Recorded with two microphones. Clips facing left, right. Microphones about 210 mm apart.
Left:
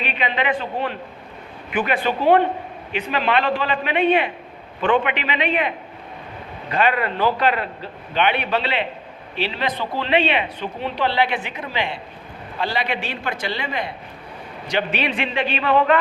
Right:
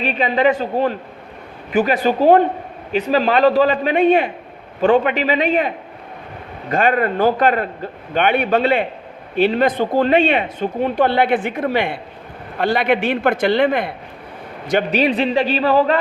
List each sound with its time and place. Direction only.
0.0 s a man's voice: 40° right (ahead or behind); by 13.9 s 55° right (ahead or behind)
14.7 s a man's voice: 45° right (ahead or behind)